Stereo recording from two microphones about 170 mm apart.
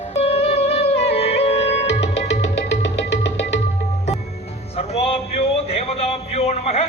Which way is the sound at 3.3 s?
90° left.